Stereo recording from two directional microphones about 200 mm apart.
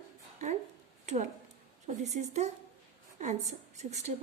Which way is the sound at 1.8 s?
35° right (ahead or behind).